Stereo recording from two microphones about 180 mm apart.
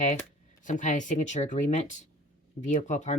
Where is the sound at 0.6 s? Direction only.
45° left (ahead or behind).